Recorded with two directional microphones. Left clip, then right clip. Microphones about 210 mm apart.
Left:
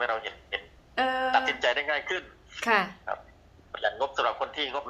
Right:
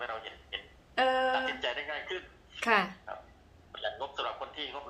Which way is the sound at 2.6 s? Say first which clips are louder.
Left 3 dB; centre (ahead or behind).